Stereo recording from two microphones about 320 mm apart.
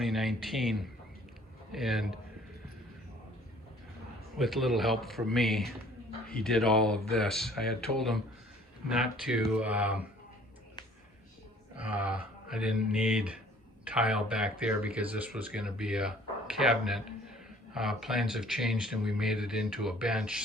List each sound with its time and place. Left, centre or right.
0.0 s speech: centre
4.4 s speech: centre
11.8 s speech: centre